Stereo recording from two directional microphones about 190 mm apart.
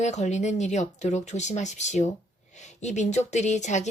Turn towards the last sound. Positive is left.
turn(degrees=40)  # may be behind; listen again after turning